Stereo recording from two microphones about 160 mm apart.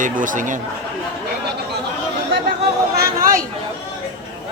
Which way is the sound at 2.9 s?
70° right (ahead or behind).